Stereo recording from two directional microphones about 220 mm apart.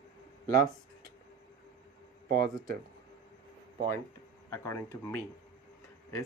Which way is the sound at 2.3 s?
40° right (ahead or behind).